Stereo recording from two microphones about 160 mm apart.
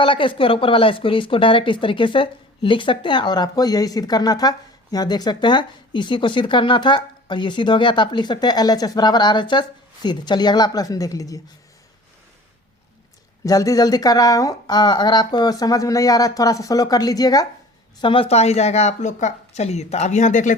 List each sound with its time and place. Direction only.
0.0 s speech: 30° left (ahead or behind)
13.4 s speech: 20° left (ahead or behind)
18.0 s speech: 35° left (ahead or behind); by 20.6 s 50° left (ahead or behind)